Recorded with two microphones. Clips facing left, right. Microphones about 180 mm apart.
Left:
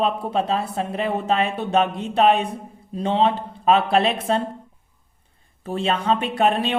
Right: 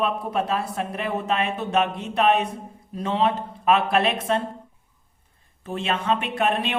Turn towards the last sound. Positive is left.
turn(degrees=30)  # may be behind; listen again after turning